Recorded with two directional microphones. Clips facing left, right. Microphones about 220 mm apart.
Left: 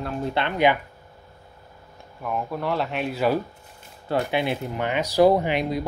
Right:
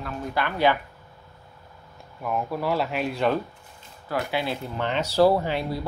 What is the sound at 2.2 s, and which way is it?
Speech, centre (ahead or behind).